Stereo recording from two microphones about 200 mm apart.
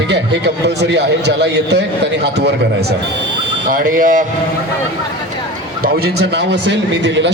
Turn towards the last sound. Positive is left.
turn(degrees=-65)  # may be behind; listen again after turning